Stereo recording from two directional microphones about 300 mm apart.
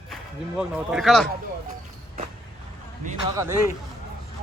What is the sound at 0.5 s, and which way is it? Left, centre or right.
Speech, centre.